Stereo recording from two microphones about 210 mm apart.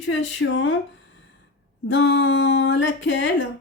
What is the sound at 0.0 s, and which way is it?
Female singing, 65° left (ahead or behind).